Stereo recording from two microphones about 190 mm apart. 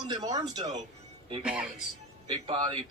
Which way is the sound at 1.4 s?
5° right (ahead or behind).